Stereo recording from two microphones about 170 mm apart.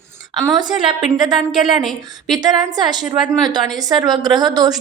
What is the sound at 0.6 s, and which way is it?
Speech, 25° right (ahead or behind).